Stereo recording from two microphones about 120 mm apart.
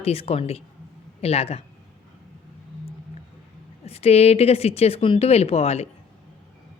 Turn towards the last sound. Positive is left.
turn(degrees=60)  # may be behind; listen again after turning